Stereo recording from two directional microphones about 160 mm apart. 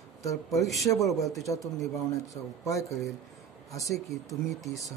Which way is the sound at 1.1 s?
20° left (ahead or behind).